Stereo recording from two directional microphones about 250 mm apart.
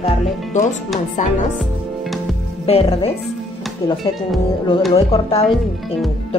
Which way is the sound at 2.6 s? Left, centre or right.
Left.